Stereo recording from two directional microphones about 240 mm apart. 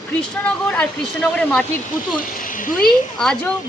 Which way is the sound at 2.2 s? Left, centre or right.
Left.